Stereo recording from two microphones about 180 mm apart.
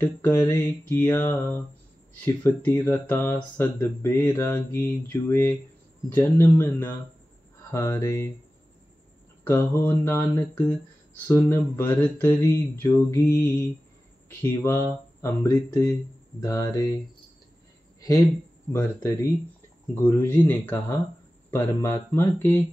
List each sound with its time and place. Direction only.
0.0 s mantra: 10° left (ahead or behind)
9.5 s mantra: 10° left (ahead or behind)
16.3 s speech: 20° left (ahead or behind)
18.7 s mantra: 15° left (ahead or behind)